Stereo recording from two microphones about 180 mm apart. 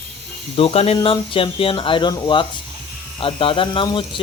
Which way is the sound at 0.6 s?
30° left (ahead or behind).